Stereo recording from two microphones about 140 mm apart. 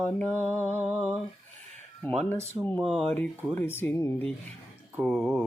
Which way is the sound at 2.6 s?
20° right (ahead or behind).